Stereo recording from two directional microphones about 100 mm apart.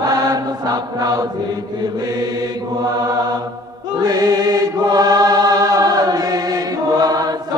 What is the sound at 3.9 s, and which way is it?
Chant, 40° right (ahead or behind).